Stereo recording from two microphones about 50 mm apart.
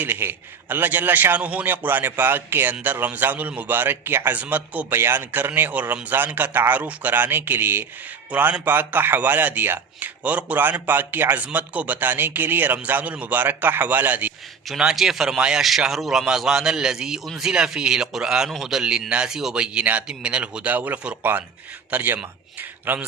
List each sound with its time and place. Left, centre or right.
0.0 s speech: right
1.6 s speech: right
3.8 s speech: right
4.4 s speech: right
4.9 s speech: right
8.3 s speech: right
10.0 s speech: right
14.9 s a man's voice: centre
15.4 s a man's voice: centre
15.6 s a man's voice: centre
18.4 s a man's voice: centre
18.8 s a man's voice: centre
19.5 s a man's voice: right